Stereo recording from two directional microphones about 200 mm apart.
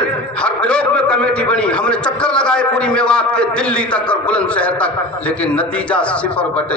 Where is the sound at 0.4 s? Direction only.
5° left (ahead or behind).